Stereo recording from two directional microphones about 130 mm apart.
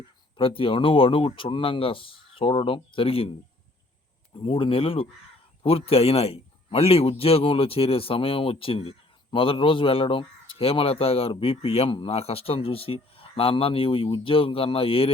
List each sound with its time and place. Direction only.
0.3 s a man's voice: 45° left (ahead or behind)
4.4 s a man's voice: 45° left (ahead or behind)